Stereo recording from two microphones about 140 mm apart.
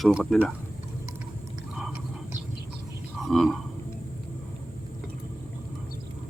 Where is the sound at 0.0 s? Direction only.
Centre (ahead or behind).